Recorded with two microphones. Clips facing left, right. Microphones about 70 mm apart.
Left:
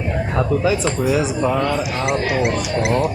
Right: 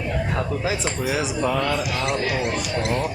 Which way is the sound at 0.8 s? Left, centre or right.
Left.